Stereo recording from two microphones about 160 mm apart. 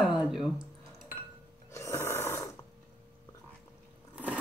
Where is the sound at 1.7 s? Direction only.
20° left (ahead or behind).